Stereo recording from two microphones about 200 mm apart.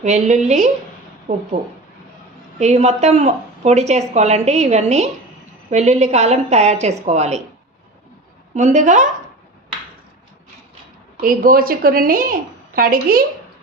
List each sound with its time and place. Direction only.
0.0 s speech: 35° right (ahead or behind)
2.6 s speech: 35° right (ahead or behind)
8.5 s speech: 35° right (ahead or behind)
11.2 s a woman's voice: 45° right (ahead or behind)